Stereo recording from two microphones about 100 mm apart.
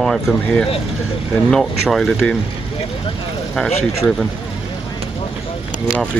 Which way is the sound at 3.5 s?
5° left (ahead or behind).